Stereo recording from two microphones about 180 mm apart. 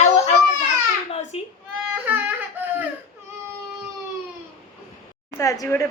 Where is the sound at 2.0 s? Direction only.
10° right (ahead or behind).